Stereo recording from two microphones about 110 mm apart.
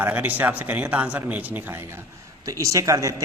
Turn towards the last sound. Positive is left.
turn(degrees=-30)  # may be behind; listen again after turning